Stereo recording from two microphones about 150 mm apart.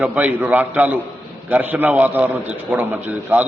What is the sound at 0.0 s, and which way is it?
A man's voice, 10° right (ahead or behind).